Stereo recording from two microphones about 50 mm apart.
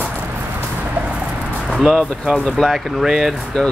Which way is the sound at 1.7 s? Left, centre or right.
Centre.